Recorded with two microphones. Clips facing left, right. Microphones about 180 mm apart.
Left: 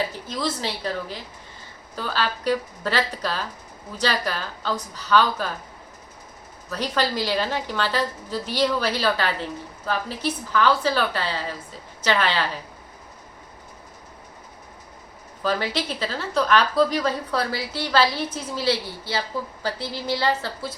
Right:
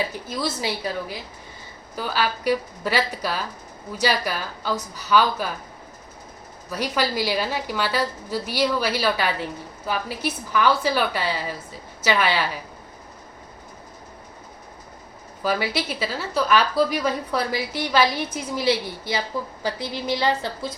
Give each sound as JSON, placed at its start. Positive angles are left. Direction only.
{"t": 0.1, "sound": "a woman's voice", "side_deg": -10}
{"t": 6.7, "sound": "a woman's voice", "side_deg": -10}
{"t": 15.4, "sound": "a woman's voice", "side_deg": -10}